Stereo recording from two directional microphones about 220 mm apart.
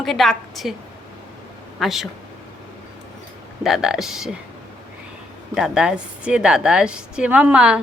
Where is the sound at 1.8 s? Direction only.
Centre (ahead or behind).